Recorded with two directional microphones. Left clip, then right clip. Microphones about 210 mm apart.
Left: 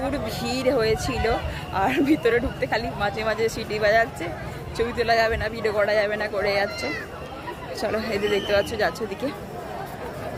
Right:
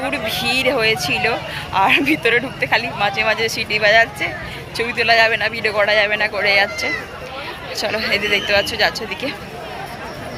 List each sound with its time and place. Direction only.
0.0 s speech: 20° left (ahead or behind)
7.8 s speech: 30° left (ahead or behind)